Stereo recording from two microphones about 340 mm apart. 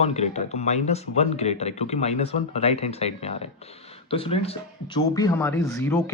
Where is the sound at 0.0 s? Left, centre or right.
Centre.